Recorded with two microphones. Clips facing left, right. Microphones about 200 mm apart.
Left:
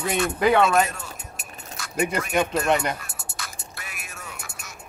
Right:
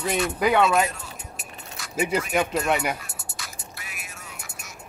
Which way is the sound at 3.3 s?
55° left (ahead or behind).